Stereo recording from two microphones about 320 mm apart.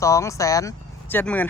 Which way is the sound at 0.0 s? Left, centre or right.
Centre.